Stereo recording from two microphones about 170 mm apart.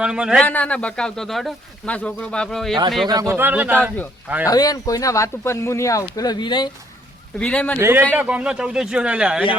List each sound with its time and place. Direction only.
0.0 s speech: 5° right (ahead or behind)
0.4 s speech: 10° left (ahead or behind)
3.1 s a man's voice: 20° right (ahead or behind)
4.4 s speech: 20° left (ahead or behind)
7.3 s a man's voice: 5° left (ahead or behind)
7.8 s a man's voice: 15° right (ahead or behind)